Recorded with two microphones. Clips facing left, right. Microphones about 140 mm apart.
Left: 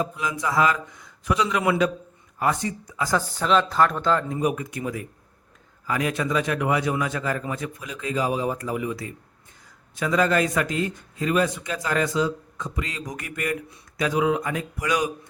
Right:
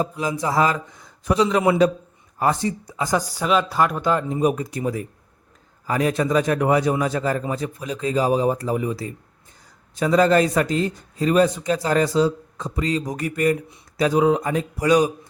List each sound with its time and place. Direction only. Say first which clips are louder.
0.2 s a man's voice: right 2 dB; 35° right (ahead or behind)
3.1 s speech: right 1 dB; 15° right (ahead or behind)
4.4 s a man's voice: right 4 dB; 30° right (ahead or behind)